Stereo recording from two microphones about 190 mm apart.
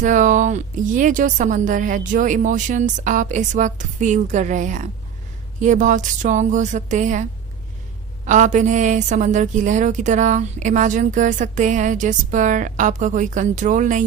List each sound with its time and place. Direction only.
0.0 s a woman's voice: 40° right (ahead or behind)
8.3 s a woman's voice: 40° right (ahead or behind)